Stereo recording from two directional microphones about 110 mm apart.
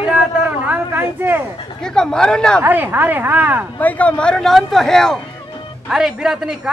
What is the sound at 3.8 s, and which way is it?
Speech, 15° left (ahead or behind).